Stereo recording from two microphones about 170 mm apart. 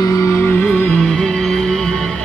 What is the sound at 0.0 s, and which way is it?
Music, 15° left (ahead or behind).